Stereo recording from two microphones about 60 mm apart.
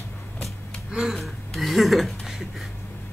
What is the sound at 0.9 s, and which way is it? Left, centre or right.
Gasp, centre.